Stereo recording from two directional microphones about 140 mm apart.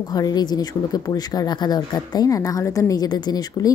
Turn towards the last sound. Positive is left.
turn(degrees=30)  # may be behind; listen again after turning